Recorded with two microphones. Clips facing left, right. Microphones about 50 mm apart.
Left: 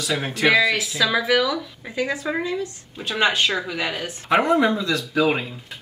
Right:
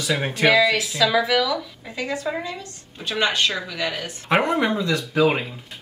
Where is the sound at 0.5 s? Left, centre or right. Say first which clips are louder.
Even; centre.